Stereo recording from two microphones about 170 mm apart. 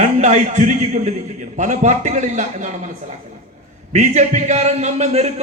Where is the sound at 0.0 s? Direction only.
45° right (ahead or behind).